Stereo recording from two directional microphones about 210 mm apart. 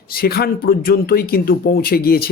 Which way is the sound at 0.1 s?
45° left (ahead or behind).